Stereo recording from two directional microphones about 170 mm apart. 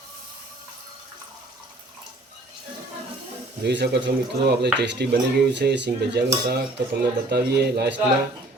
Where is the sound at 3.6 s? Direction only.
80° right.